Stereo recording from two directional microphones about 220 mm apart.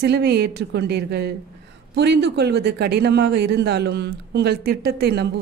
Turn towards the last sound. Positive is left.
turn(degrees=-45)  # may be behind; listen again after turning